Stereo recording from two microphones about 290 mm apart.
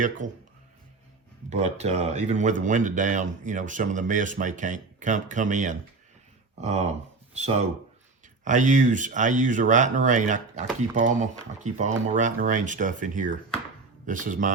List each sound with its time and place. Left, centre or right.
0.2 s speech: right
1.5 s speech: right